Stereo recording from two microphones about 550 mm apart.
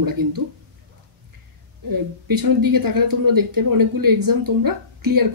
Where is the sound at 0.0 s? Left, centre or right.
Right.